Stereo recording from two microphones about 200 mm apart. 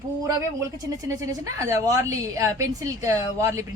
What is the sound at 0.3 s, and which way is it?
Speech, 15° right (ahead or behind).